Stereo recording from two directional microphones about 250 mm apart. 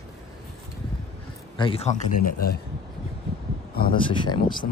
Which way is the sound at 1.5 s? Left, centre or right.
Left.